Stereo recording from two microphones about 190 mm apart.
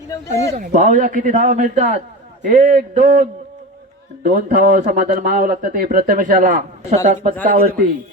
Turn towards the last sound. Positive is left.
turn(degrees=-55)  # may be behind; listen again after turning